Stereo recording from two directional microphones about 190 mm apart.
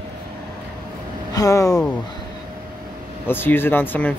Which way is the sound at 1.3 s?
15° left (ahead or behind).